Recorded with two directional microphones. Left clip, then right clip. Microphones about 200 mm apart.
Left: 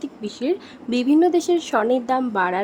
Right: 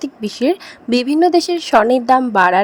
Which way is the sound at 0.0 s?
30° right (ahead or behind).